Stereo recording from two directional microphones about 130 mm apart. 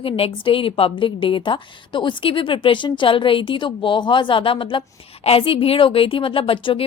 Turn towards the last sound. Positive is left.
turn(degrees=40)  # may be behind; listen again after turning